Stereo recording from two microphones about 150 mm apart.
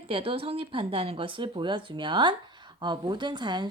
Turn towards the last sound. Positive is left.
turn(degrees=-30)  # may be behind; listen again after turning